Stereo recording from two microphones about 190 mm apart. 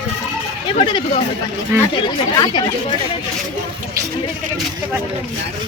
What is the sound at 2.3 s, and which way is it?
Speech, 20° left (ahead or behind).